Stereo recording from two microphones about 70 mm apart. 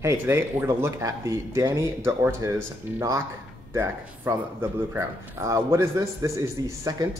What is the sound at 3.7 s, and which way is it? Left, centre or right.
Speech, right.